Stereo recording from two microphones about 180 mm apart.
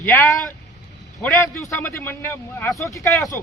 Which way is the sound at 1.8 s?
10° left (ahead or behind).